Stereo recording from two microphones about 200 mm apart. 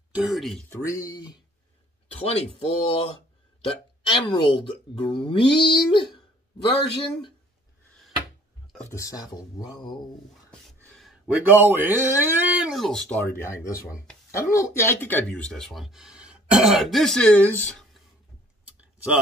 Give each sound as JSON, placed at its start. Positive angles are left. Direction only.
{"t": 0.1, "sound": "speech", "side_deg": 0}
{"t": 0.7, "sound": "speech", "side_deg": 15}
{"t": 2.2, "sound": "speech", "side_deg": 30}
{"t": 8.7, "sound": "speech", "side_deg": 10}
{"t": 10.5, "sound": "speech", "side_deg": 5}